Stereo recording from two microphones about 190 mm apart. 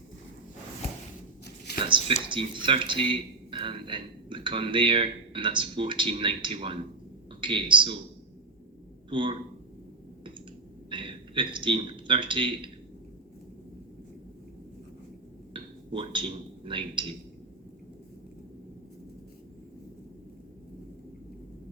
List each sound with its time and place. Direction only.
1.8 s speech: 25° right (ahead or behind)
9.0 s speech: 25° right (ahead or behind)
10.8 s speech: 25° right (ahead or behind)
15.5 s a man's voice: 25° right (ahead or behind)